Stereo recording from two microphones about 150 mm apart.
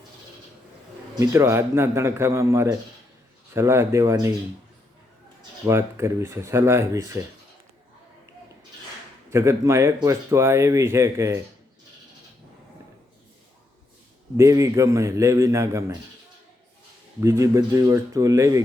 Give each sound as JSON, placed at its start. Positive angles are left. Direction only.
{"t": 1.1, "sound": "speech", "side_deg": -20}
{"t": 5.6, "sound": "speech", "side_deg": -20}
{"t": 9.3, "sound": "speech", "side_deg": -20}
{"t": 14.3, "sound": "speech", "side_deg": -20}
{"t": 17.2, "sound": "speech", "side_deg": -20}